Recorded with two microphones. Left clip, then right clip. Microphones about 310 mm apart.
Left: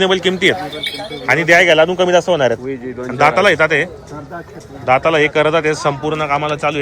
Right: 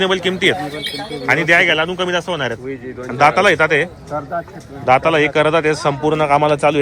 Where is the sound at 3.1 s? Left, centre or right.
Centre.